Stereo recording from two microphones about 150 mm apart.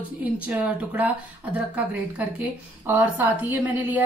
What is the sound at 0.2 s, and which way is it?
Speech, 10° right (ahead or behind).